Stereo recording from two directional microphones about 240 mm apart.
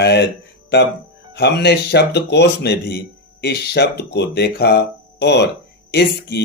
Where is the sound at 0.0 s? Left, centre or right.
Left.